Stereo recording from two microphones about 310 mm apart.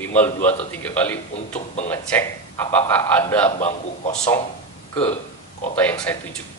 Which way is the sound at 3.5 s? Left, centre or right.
Left.